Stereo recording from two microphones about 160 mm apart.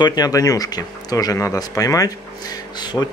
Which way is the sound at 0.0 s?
25° left (ahead or behind).